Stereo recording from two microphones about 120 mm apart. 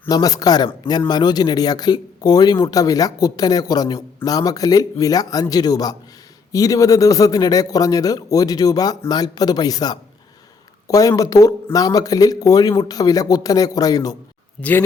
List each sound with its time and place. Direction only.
0.1 s speech: 30° left (ahead or behind)
14.6 s speech: 15° left (ahead or behind)